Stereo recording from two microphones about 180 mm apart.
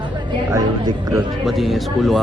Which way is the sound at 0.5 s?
15° right (ahead or behind).